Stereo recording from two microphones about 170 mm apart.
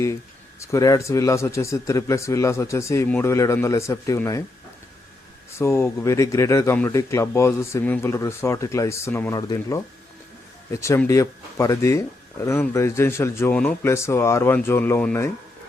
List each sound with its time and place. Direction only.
0.6 s speech: 20° left (ahead or behind)
5.5 s speech: 15° left (ahead or behind)